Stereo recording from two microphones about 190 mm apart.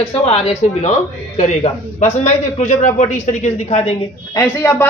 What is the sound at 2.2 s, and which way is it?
A man's voice, 40° left (ahead or behind).